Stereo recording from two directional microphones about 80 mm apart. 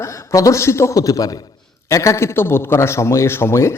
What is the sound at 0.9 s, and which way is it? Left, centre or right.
A man's voice, left.